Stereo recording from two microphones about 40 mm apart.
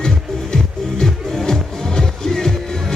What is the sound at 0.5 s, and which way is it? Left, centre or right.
Music, centre.